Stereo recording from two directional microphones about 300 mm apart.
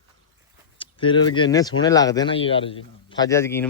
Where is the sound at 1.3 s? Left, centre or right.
Centre.